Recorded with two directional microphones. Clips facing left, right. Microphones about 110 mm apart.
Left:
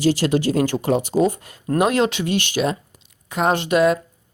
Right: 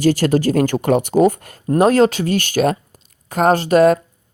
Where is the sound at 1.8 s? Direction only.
40° right (ahead or behind).